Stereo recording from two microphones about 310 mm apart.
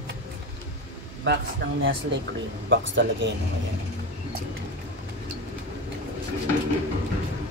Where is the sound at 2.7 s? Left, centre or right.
Right.